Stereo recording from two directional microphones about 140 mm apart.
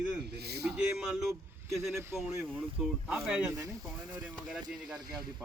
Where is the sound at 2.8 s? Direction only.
5° right (ahead or behind).